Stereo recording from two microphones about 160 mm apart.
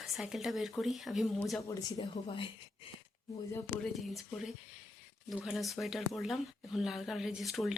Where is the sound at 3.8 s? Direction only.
Centre (ahead or behind).